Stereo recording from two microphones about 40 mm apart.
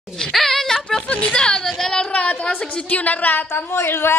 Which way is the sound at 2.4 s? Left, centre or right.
Left.